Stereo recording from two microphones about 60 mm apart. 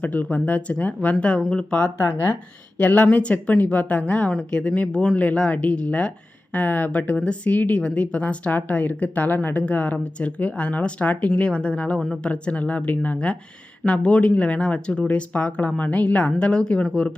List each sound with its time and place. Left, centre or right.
0.0 s a woman's voice: left
11.9 s a woman's voice: centre
12.2 s a woman's voice: left